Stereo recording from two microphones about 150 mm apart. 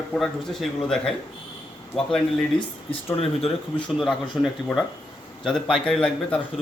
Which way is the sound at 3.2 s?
40° left (ahead or behind).